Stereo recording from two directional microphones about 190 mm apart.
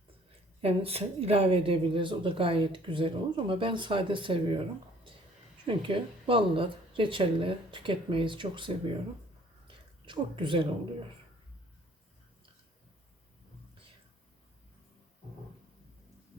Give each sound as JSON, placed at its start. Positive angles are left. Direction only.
{"t": 0.6, "sound": "a woman's voice", "side_deg": -30}
{"t": 5.6, "sound": "a woman's voice", "side_deg": -25}
{"t": 9.6, "sound": "a sound", "side_deg": -25}